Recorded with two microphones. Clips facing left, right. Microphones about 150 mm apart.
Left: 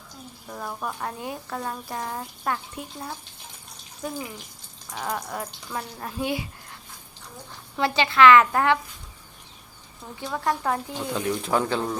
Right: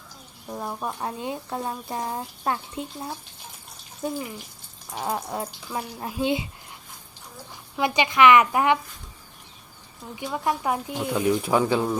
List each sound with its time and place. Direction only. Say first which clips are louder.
0.4 s speech: right 2 dB; 20° right (ahead or behind)
4.9 s speech: right 2 dB; 25° right (ahead or behind)
10.2 s speech: even; 15° right (ahead or behind)